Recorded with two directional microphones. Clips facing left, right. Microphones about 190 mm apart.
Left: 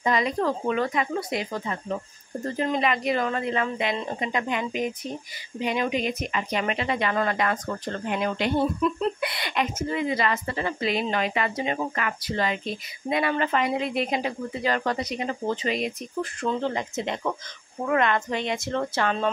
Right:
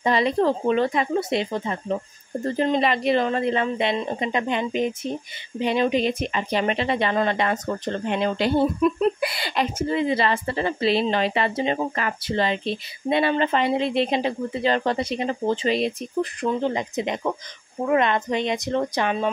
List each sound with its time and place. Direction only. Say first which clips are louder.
0.0 s speech: right 4 dB; 30° right (ahead or behind)
16.3 s speech: right 1 dB; 15° right (ahead or behind)